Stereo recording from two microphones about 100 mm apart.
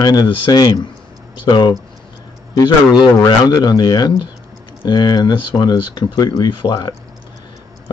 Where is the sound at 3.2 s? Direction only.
40° left (ahead or behind).